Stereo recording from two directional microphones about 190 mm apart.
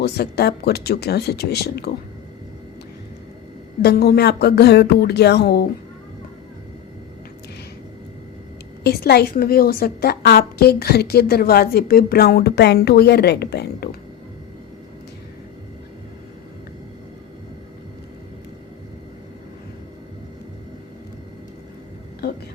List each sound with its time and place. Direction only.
0.0 s a woman's voice: 55° left (ahead or behind)
3.8 s a woman's voice: 60° left (ahead or behind)
8.8 s a woman's voice: 55° left (ahead or behind)